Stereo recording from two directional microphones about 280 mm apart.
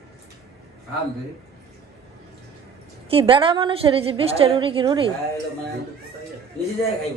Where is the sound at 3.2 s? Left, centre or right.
Centre.